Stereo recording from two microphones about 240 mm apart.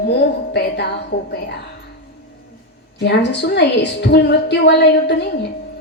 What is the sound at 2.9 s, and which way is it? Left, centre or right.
A woman's voice, left.